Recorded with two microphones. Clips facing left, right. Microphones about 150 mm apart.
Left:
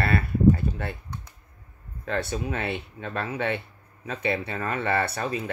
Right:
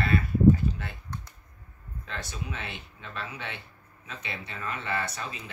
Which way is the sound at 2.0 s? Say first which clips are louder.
Left 10 dB; 55° left (ahead or behind).